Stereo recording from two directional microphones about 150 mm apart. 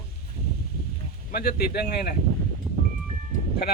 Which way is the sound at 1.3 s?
90° left.